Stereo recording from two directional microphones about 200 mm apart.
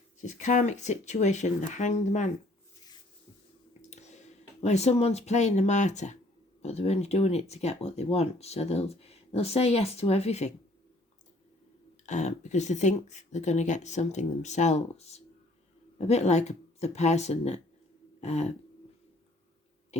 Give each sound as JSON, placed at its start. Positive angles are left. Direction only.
{"t": 0.2, "sound": "speech", "side_deg": 35}
{"t": 3.8, "sound": "a sound", "side_deg": 35}
{"t": 4.6, "sound": "speech", "side_deg": 35}
{"t": 12.0, "sound": "speech", "side_deg": 35}
{"t": 18.2, "sound": "throat clearing", "side_deg": 35}